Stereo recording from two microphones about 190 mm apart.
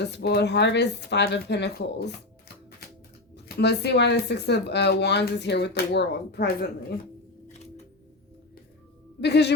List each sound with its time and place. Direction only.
0.0 s speech: 60° left (ahead or behind)
3.3 s speech: 60° left (ahead or behind)
9.2 s speech: 60° left (ahead or behind)